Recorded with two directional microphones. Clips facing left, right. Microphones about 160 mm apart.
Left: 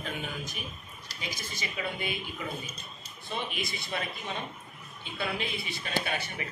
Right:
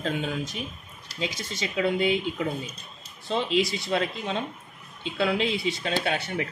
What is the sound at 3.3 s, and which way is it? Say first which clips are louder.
Speech: right 11 dB; 90° right.